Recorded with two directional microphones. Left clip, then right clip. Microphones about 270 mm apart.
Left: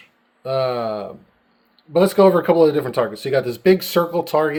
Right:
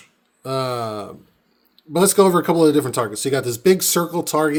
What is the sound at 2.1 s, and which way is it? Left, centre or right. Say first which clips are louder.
Speech: left 2 dB; right.